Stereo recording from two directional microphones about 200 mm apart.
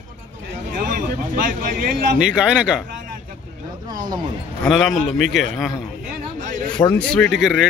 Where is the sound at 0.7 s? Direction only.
40° right (ahead or behind).